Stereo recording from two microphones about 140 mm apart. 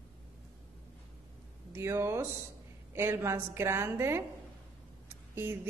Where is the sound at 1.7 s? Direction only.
15° right (ahead or behind).